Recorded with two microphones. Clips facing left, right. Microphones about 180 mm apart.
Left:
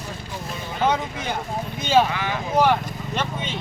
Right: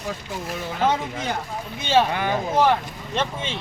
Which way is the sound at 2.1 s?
50° right (ahead or behind).